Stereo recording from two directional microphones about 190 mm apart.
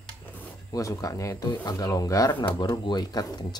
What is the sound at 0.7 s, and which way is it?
Speech, 15° left (ahead or behind).